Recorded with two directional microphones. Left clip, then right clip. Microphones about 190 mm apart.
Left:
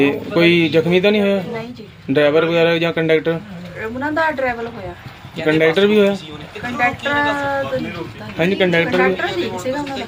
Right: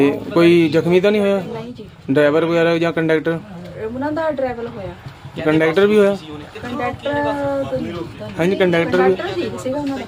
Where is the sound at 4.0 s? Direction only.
5° left (ahead or behind).